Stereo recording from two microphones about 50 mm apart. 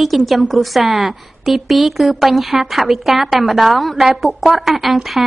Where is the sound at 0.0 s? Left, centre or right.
Centre.